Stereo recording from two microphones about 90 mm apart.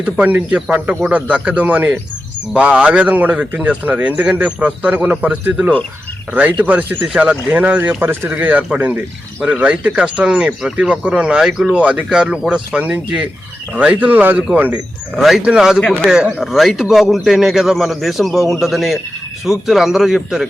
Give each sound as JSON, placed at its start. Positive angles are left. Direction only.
{"t": 0.0, "sound": "a man's voice", "side_deg": -15}
{"t": 15.1, "sound": "a man's voice", "side_deg": -5}